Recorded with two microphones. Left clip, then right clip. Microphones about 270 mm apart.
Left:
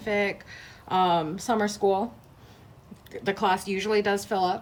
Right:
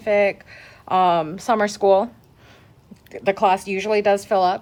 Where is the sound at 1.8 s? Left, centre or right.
Right.